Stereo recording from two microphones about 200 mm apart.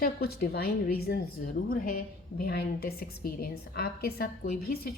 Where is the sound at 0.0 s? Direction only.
50° left (ahead or behind).